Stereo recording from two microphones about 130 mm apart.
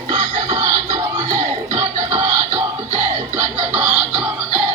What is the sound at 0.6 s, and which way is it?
Music, 25° right (ahead or behind).